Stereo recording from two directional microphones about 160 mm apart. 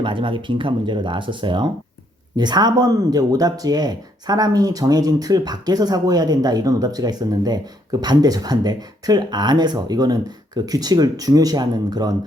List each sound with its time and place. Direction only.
0.0 s speech: 30° right (ahead or behind)